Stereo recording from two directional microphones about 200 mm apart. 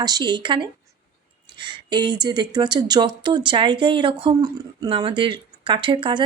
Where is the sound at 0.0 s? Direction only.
20° right (ahead or behind).